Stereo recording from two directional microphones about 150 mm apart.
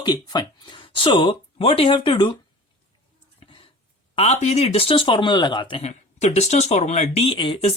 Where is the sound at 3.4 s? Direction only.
35° left (ahead or behind).